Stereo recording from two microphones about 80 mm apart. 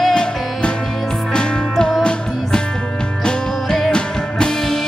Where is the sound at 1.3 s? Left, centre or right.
Centre.